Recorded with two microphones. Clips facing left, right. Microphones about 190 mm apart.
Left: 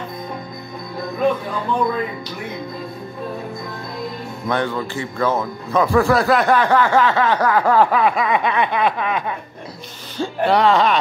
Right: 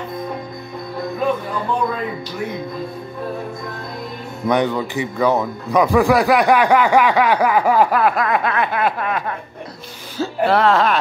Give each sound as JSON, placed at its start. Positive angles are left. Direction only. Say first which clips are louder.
{"t": 4.5, "sound": "speech", "louder": "right 4 dB", "side_deg": -15}